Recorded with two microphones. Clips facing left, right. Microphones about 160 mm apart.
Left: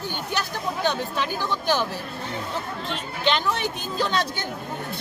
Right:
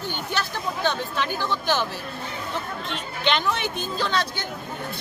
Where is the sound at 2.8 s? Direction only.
40° left (ahead or behind).